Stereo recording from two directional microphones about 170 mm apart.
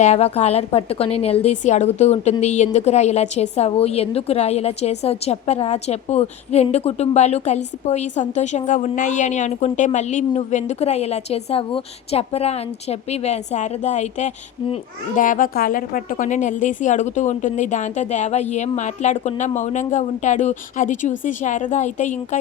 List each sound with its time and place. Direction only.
0.0 s a woman's voice: 40° left (ahead or behind)